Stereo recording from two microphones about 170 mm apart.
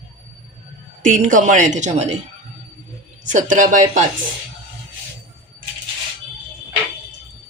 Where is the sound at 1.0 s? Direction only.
50° right (ahead or behind).